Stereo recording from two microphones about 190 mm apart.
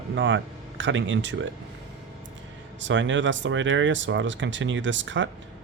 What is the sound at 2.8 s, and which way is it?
Speech, 80° right.